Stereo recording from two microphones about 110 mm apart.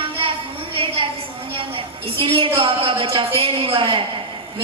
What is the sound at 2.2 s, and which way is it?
A woman's voice, 55° right (ahead or behind).